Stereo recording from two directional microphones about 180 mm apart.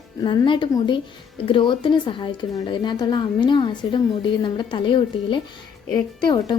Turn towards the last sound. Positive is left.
turn(degrees=25)  # may be behind; listen again after turning